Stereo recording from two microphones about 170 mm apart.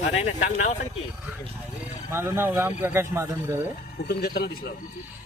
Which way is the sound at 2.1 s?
15° right (ahead or behind).